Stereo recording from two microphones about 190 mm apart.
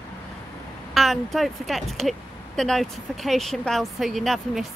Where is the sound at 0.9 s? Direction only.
Centre (ahead or behind).